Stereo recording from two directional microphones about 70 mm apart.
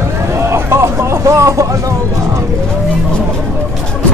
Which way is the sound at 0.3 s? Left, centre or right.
Right.